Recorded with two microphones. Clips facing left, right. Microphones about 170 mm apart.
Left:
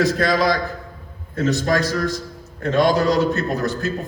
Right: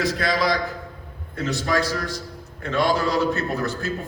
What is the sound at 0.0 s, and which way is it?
A man's voice, 45° left (ahead or behind).